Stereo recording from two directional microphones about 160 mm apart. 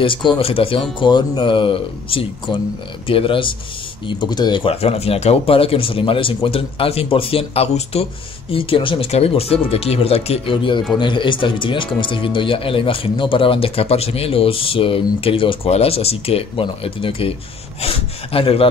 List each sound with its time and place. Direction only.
0.0 s speech: 30° left (ahead or behind)